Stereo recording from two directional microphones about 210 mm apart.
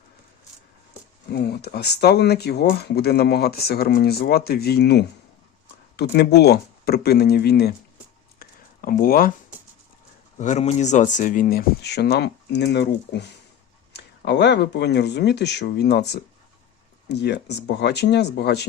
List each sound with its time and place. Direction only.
1.3 s speech: 50° left (ahead or behind)
8.4 s a sound: 45° left (ahead or behind)
10.3 s speech: 35° left (ahead or behind); by 18.6 s 55° left (ahead or behind)